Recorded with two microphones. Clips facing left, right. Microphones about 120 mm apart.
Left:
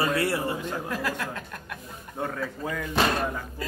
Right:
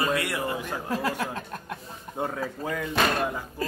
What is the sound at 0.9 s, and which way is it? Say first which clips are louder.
Speech: right 7 dB; 25° right (ahead or behind).